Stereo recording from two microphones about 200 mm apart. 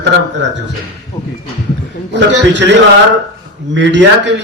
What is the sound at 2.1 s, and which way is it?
Speech, 60° right (ahead or behind).